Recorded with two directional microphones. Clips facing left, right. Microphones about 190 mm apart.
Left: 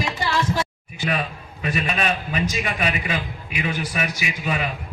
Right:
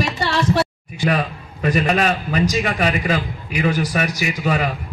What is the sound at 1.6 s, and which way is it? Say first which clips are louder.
A man's voice: right 6 dB; 40° right (ahead or behind).